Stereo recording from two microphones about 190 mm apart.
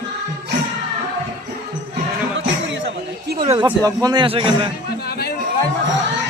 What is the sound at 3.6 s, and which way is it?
A man's voice, 15° right (ahead or behind).